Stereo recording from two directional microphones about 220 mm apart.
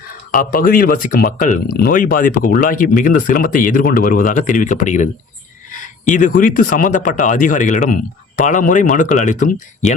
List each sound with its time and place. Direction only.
0.3 s speech: 40° left (ahead or behind)